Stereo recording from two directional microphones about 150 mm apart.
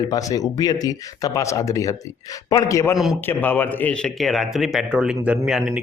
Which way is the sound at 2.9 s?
Centre (ahead or behind).